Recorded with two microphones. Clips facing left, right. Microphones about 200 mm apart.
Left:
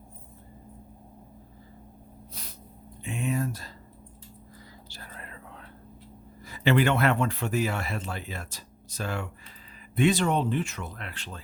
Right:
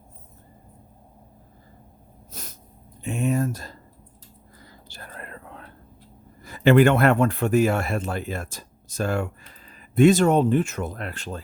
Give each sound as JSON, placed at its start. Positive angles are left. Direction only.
{"t": 2.3, "sound": "a sound", "side_deg": -45}
{"t": 4.9, "sound": "whispering", "side_deg": -55}
{"t": 6.4, "sound": "speech", "side_deg": -50}